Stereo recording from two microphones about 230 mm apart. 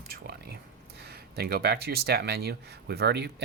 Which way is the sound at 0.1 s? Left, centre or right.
Right.